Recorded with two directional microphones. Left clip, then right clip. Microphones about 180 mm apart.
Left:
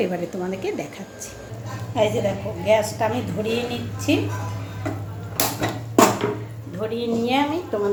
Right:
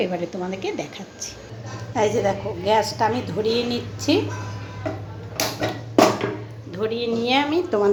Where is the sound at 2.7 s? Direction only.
15° right (ahead or behind).